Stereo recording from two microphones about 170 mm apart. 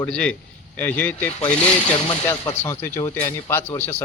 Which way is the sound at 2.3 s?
15° left (ahead or behind).